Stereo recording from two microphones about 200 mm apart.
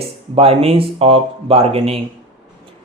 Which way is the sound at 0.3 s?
30° right (ahead or behind).